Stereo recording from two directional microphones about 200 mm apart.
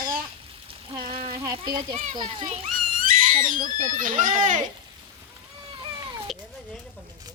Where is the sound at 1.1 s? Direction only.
30° right (ahead or behind).